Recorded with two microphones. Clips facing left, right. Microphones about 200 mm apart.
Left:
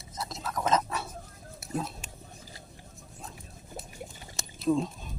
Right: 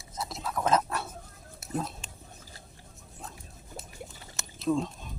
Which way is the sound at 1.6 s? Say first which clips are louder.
Even; 5° left (ahead or behind).